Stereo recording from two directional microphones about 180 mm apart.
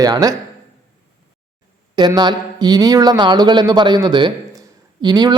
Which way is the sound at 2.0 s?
25° right (ahead or behind).